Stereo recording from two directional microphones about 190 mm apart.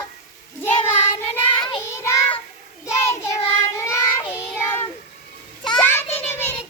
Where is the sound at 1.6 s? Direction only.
20° left (ahead or behind).